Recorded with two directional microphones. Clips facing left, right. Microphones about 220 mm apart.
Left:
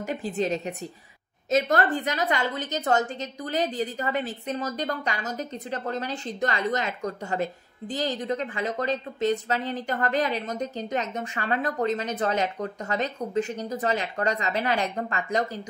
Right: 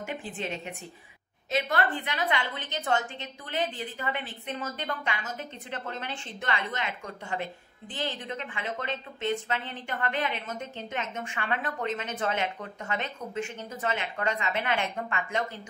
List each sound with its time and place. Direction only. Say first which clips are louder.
0.0 s a woman's voice: left 8 dB; 40° left (ahead or behind)